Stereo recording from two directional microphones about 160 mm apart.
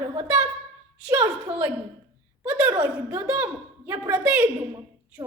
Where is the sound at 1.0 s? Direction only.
15° right (ahead or behind).